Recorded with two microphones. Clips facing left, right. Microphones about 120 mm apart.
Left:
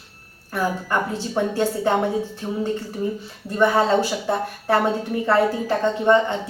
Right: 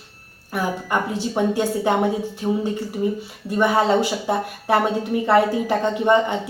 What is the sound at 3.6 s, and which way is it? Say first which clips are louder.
Speech: even; 15° right (ahead or behind).